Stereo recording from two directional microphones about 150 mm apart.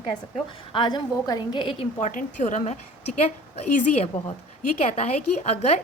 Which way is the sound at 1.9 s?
55° left (ahead or behind).